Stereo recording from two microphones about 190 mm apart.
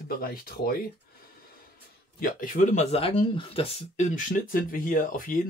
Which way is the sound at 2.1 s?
45° left (ahead or behind).